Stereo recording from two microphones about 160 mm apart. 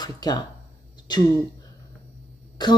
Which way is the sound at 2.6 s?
25° left (ahead or behind).